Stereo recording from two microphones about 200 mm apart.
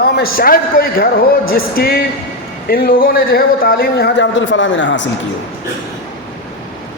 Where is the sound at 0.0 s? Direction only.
50° left (ahead or behind); by 5.0 s 65° left (ahead or behind).